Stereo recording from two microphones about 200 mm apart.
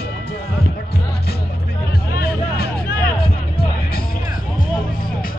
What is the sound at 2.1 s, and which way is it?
Music, 50° left (ahead or behind).